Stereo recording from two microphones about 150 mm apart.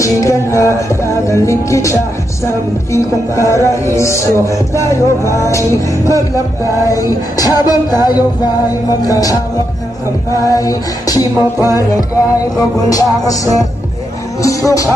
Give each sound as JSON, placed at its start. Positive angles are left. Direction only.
{"t": 0.0, "sound": "speech", "side_deg": 20}